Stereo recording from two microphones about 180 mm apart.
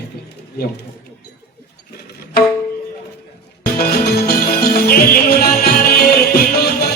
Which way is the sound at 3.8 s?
55° left (ahead or behind).